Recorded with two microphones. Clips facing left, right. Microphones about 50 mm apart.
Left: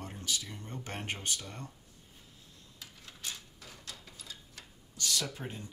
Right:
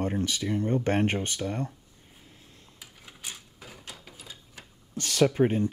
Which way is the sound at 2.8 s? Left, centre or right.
Centre.